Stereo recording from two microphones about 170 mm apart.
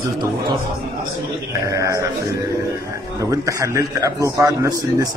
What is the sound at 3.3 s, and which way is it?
A man's voice, 20° right (ahead or behind).